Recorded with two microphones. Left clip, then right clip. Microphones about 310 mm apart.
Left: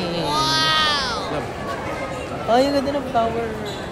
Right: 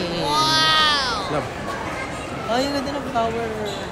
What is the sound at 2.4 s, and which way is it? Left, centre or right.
Speech, left.